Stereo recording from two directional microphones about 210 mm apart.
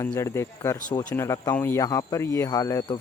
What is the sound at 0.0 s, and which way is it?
Speech, 15° left (ahead or behind).